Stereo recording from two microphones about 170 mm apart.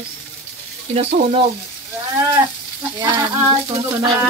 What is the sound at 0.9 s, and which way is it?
Sizzle, 35° right (ahead or behind).